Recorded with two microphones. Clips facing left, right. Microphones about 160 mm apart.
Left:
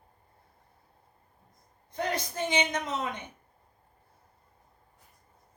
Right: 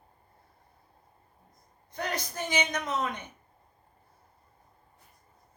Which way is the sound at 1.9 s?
25° left (ahead or behind).